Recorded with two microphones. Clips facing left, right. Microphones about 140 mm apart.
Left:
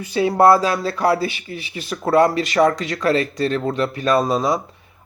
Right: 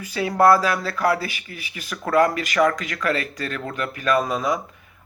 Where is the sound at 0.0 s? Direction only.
25° left (ahead or behind).